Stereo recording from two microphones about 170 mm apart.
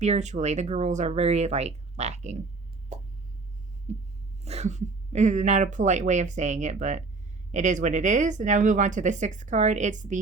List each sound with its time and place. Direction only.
0.0 s speech: 45° right (ahead or behind)
3.9 s a sound: 40° right (ahead or behind)
4.4 s speech: 40° right (ahead or behind)